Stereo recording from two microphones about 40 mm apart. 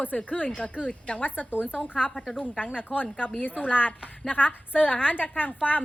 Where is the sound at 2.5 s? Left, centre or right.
Left.